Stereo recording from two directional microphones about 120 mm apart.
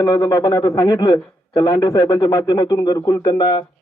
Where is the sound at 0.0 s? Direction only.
30° left (ahead or behind).